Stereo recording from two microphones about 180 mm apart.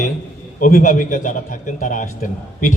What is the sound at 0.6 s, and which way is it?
A man's voice, 45° left (ahead or behind).